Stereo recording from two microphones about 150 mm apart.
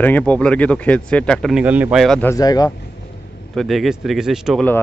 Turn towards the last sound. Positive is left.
turn(degrees=-5)  # may be behind; listen again after turning